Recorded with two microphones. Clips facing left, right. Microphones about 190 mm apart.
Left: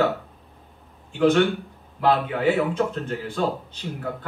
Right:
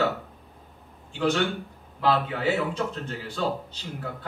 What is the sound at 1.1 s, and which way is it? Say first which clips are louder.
A man's voice: left 6 dB; 55° left (ahead or behind).